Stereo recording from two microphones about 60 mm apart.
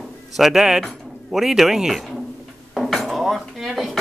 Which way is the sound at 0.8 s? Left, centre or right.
Centre.